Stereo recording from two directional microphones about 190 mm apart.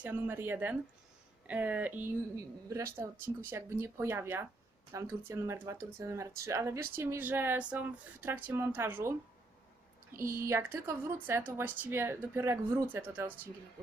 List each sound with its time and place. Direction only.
0.0 s speech: 10° right (ahead or behind)
10.2 s speech: 15° right (ahead or behind)